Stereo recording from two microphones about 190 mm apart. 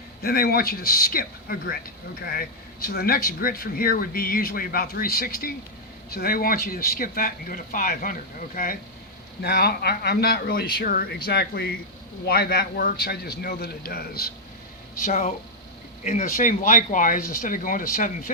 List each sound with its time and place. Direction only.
0.2 s a man's voice: 55° left (ahead or behind)
14.9 s speech: 40° left (ahead or behind)